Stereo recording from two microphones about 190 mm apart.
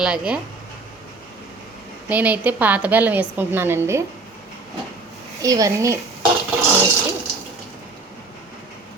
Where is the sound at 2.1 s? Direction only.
10° right (ahead or behind).